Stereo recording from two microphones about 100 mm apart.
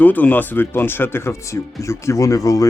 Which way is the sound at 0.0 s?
15° left (ahead or behind).